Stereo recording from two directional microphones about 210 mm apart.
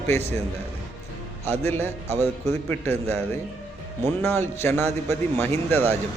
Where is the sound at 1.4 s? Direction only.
30° right (ahead or behind).